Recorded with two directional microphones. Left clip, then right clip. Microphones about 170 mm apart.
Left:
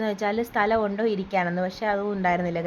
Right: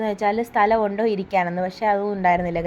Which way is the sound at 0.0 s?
10° right (ahead or behind).